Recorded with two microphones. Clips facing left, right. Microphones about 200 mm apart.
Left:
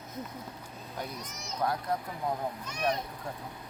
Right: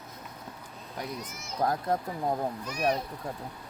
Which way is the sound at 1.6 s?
40° right (ahead or behind).